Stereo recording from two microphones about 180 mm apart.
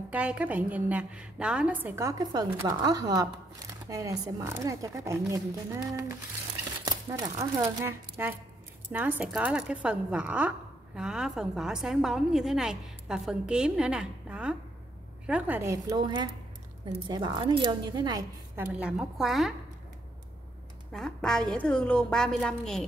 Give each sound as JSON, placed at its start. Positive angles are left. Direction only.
{"t": 0.1, "sound": "a woman's voice", "side_deg": -5}
{"t": 18.6, "sound": "a woman's voice", "side_deg": -5}
{"t": 20.9, "sound": "a woman's voice", "side_deg": 5}